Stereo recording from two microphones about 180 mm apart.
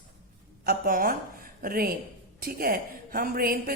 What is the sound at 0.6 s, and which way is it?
A woman's voice, 55° right (ahead or behind).